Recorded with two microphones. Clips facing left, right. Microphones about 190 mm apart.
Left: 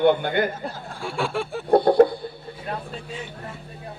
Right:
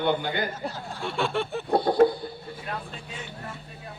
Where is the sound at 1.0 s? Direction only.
10° left (ahead or behind).